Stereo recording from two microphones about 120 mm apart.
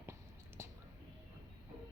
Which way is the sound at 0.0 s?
20° right (ahead or behind).